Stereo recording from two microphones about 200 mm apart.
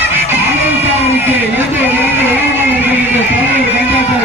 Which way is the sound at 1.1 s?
10° right (ahead or behind).